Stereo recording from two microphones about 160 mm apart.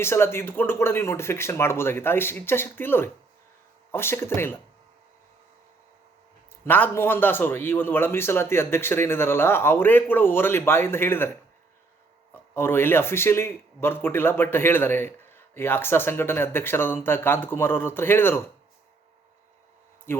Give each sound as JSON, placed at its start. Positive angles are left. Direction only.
{"t": 0.0, "sound": "speech", "side_deg": 15}
{"t": 6.7, "sound": "speech", "side_deg": 10}
{"t": 12.3, "sound": "speech", "side_deg": 15}
{"t": 20.1, "sound": "speech", "side_deg": 15}